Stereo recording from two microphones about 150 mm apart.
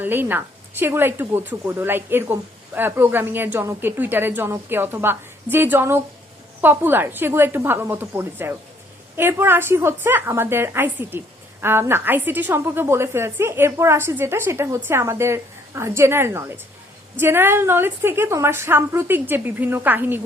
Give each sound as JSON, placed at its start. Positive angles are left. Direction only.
{"t": 0.0, "sound": "a woman's voice", "side_deg": -15}